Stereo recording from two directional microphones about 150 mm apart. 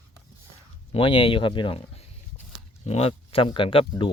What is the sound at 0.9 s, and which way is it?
Speech, 35° left (ahead or behind).